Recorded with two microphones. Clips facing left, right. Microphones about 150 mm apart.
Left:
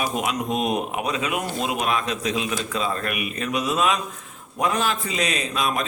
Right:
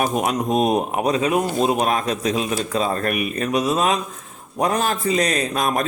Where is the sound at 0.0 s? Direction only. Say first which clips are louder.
Right 4 dB; 40° right (ahead or behind).